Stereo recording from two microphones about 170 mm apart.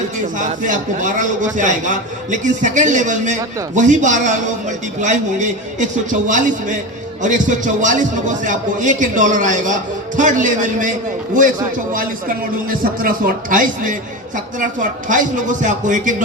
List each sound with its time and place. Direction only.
0.3 s a man's voice: 50° right (ahead or behind)
13.0 s a man's voice: 55° right (ahead or behind)